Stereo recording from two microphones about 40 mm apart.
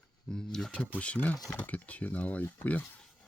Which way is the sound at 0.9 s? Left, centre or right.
Left.